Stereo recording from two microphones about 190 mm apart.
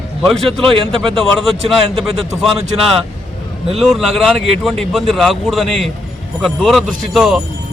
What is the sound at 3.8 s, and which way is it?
A man's voice, centre (ahead or behind).